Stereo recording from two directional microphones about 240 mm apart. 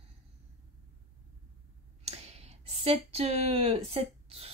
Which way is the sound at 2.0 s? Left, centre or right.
Right.